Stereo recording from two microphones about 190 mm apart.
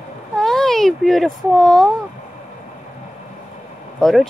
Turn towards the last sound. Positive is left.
turn(degrees=0)  # may be behind; listen again after turning